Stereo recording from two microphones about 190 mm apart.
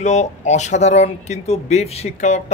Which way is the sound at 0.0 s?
40° left (ahead or behind).